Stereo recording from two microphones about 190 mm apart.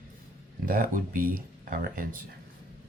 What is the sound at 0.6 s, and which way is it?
Speech, 45° right (ahead or behind).